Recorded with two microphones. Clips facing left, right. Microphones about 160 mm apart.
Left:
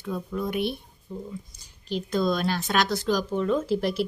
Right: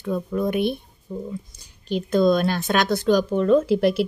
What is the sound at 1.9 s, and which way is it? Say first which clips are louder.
Speech: right 7 dB; 55° right (ahead or behind).